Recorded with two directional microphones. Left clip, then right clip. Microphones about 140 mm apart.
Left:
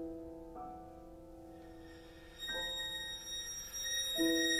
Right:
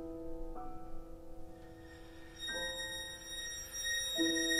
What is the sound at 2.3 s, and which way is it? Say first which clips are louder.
Music: even; 45° left (ahead or behind).